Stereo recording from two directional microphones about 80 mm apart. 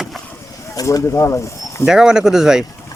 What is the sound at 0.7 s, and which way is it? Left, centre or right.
Speech, left.